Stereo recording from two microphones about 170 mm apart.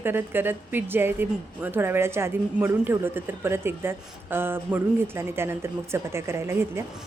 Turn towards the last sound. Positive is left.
turn(degrees=-15)  # may be behind; listen again after turning